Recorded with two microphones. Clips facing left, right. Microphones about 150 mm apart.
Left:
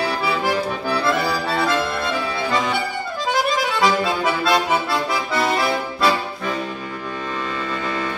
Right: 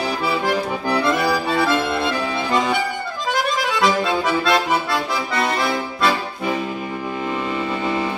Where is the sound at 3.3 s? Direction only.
Centre (ahead or behind).